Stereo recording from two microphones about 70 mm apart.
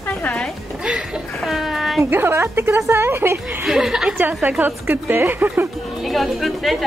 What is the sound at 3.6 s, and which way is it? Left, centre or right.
Speech, centre.